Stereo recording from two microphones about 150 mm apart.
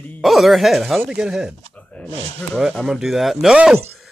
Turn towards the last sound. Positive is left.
turn(degrees=-5)  # may be behind; listen again after turning